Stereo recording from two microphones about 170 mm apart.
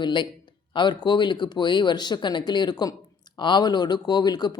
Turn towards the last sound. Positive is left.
turn(degrees=25)  # may be behind; listen again after turning